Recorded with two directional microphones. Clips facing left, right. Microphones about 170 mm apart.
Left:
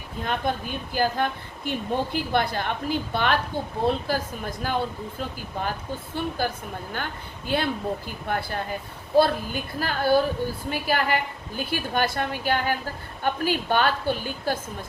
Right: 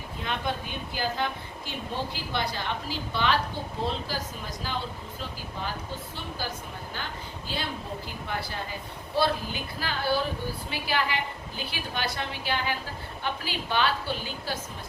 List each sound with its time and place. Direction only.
0.2 s a woman's voice: 45° left (ahead or behind)